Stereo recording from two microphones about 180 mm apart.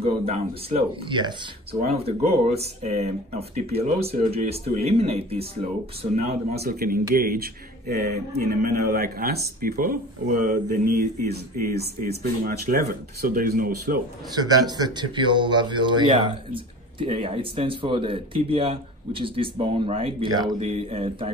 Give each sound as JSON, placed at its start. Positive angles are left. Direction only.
{"t": 0.0, "sound": "speech", "side_deg": -35}
{"t": 6.6, "sound": "speech", "side_deg": -55}
{"t": 11.0, "sound": "speech", "side_deg": -60}
{"t": 14.3, "sound": "speech", "side_deg": -20}